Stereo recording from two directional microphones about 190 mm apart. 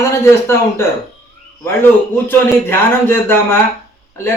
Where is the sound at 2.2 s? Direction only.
10° left (ahead or behind).